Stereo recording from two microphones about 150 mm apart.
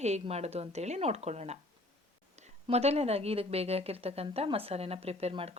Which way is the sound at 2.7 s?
45° right (ahead or behind).